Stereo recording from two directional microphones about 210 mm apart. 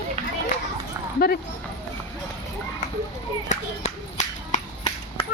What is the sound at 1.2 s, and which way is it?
Speech, 45° left (ahead or behind).